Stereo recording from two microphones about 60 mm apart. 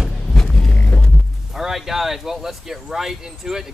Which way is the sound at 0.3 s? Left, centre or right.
Centre.